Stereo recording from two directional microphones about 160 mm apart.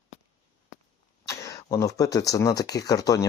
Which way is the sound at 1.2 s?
20° left (ahead or behind).